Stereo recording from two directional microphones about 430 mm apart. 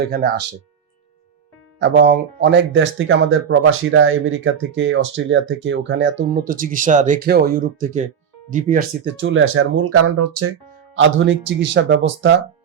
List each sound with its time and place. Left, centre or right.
0.1 s speech: right
1.8 s speech: right